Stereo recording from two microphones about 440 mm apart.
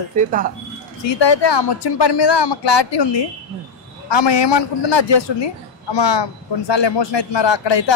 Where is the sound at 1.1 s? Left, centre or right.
Left.